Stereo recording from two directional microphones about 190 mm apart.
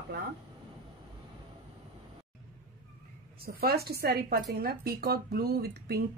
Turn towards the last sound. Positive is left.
turn(degrees=-55)  # may be behind; listen again after turning